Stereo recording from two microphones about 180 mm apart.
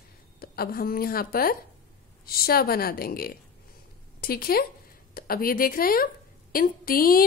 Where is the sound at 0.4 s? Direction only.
55° left (ahead or behind).